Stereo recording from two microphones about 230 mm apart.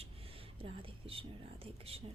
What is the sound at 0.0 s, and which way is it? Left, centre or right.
Speech, right.